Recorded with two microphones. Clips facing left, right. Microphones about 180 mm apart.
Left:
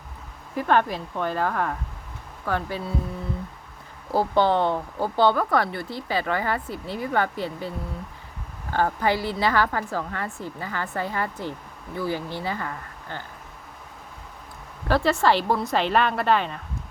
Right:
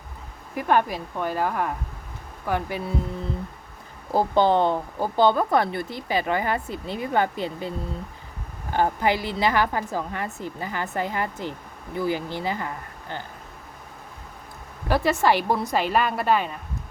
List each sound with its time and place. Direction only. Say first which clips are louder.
0.5 s a woman's voice: even; 10° right (ahead or behind)
4.1 s speech: right 1 dB; 20° right (ahead or behind)
8.7 s a woman's voice: right 1 dB; 15° right (ahead or behind)
14.8 s a woman's voice: even; 15° right (ahead or behind)